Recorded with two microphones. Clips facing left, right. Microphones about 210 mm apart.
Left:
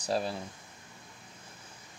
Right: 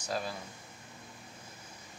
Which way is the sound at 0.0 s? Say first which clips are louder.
Left 5 dB; 30° left (ahead or behind).